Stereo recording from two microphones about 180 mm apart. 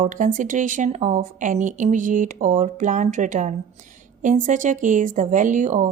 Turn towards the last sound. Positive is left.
turn(degrees=-45)  # may be behind; listen again after turning